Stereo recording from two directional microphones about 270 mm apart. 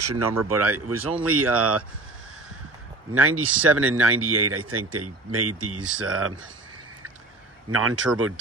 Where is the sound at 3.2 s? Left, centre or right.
Right.